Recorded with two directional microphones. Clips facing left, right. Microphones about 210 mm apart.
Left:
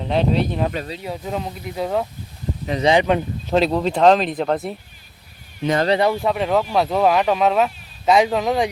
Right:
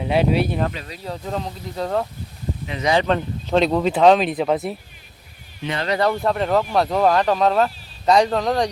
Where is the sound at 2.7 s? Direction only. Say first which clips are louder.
Left 5 dB; 35° left (ahead or behind).